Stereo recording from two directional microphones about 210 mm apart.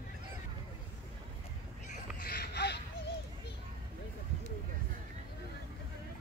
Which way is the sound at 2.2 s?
50° left (ahead or behind).